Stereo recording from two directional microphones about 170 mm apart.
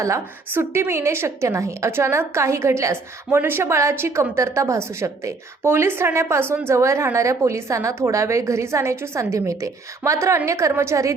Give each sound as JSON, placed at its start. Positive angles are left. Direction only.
{"t": 0.0, "sound": "a woman's voice", "side_deg": -15}